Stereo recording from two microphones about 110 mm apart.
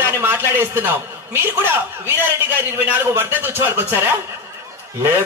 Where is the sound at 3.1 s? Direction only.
20° right (ahead or behind).